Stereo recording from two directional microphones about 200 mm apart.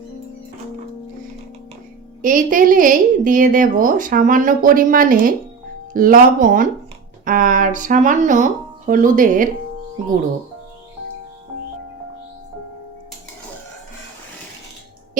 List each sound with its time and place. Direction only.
2.2 s a woman's voice: 40° right (ahead or behind)